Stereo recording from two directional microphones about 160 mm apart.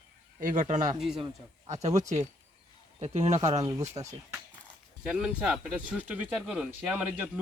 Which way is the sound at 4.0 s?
30° right (ahead or behind).